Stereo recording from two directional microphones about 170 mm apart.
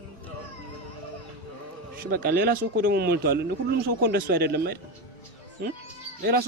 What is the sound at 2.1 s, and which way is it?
A man's voice, 60° right (ahead or behind).